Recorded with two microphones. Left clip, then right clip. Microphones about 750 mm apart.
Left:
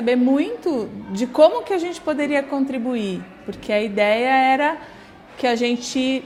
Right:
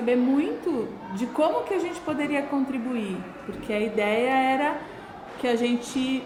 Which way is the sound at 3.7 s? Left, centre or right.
Left.